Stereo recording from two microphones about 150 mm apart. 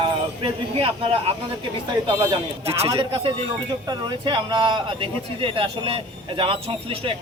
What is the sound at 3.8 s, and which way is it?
Speech, 30° right (ahead or behind).